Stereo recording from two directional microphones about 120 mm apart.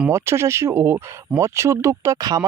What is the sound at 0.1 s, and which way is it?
Speech, 25° right (ahead or behind).